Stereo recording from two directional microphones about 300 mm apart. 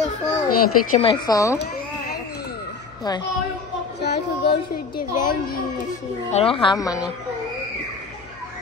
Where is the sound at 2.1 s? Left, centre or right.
Left.